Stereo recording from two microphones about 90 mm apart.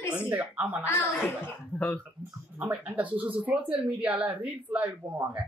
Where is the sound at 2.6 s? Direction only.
15° right (ahead or behind).